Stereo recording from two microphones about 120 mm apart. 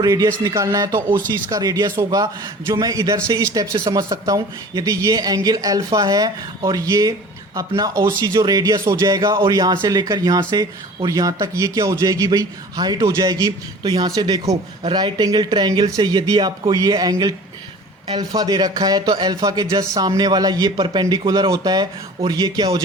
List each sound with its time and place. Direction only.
0.0 s speech: 30° right (ahead or behind)